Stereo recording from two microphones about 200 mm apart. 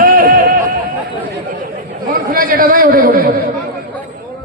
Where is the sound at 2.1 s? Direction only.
45° right (ahead or behind).